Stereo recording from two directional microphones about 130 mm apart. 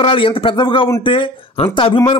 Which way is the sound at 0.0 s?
45° left (ahead or behind).